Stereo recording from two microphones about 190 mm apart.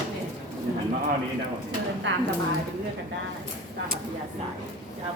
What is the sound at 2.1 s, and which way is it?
Speech, 70° right (ahead or behind).